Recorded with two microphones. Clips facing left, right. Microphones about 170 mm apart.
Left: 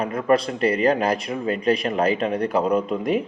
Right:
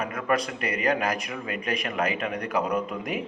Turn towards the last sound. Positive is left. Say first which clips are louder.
# left 7 dB
turn(degrees=30)  # may be behind; listen again after turning